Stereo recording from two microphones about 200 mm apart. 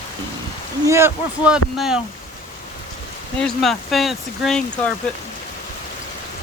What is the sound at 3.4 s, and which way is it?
Speech, centre (ahead or behind).